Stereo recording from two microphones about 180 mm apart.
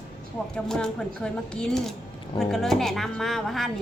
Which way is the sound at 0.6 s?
5° left (ahead or behind).